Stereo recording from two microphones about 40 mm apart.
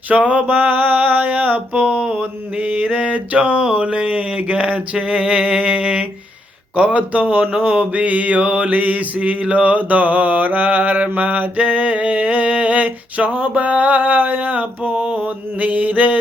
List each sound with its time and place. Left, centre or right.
0.1 s mantra: right
5.0 s a sound: right
6.7 s mantra: right